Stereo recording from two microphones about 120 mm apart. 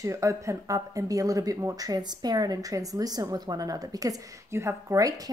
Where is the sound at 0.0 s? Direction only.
25° right (ahead or behind).